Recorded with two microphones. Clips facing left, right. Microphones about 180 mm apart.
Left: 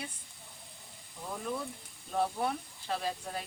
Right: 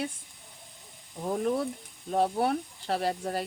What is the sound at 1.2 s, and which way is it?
Speech, 50° right (ahead or behind).